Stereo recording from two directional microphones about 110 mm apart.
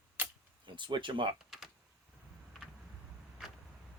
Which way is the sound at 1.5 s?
5° right (ahead or behind).